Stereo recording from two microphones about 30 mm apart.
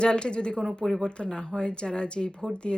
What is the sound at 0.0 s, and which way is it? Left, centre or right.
Speech, left.